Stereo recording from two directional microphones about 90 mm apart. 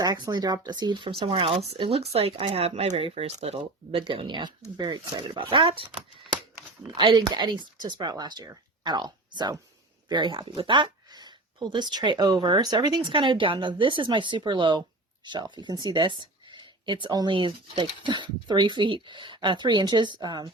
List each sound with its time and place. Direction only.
0.0 s speech: 50° right (ahead or behind)
1.2 s speech: 90° right
4.0 s speech: 70° right (ahead or behind)
6.9 s speech: 70° right (ahead or behind)
7.2 s speech: 55° right (ahead or behind)